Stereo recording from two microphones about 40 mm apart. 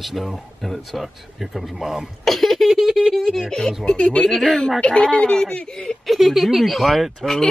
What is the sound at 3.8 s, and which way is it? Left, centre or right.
Speech, left.